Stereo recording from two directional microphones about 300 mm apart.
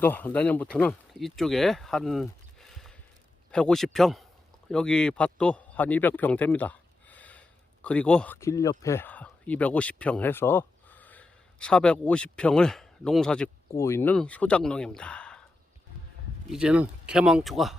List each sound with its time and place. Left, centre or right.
0.0 s speech: centre
16.5 s speech: centre